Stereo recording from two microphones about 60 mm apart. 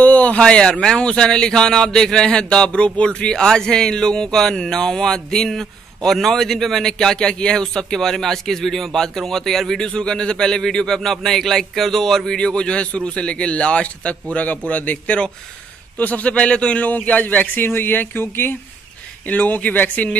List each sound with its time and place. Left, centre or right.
0.0 s a sound: left
0.4 s a man's voice: centre; by 18.6 s left
19.2 s a man's voice: left